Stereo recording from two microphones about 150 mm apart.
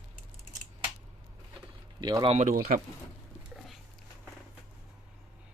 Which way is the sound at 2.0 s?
25° right (ahead or behind).